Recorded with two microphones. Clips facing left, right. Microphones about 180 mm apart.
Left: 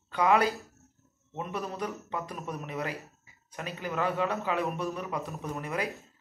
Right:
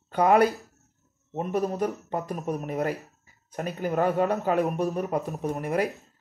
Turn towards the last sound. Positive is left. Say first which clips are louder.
# right 7 dB
turn(degrees=-40)  # may be behind; listen again after turning